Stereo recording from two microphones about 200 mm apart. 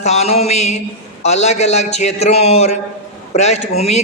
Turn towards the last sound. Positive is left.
turn(degrees=35)  # may be behind; listen again after turning